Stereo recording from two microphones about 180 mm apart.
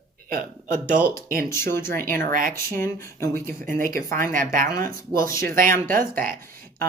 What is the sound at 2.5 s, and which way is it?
Speech, 15° left (ahead or behind).